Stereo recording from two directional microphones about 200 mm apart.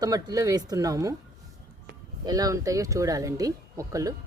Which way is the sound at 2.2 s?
20° right (ahead or behind).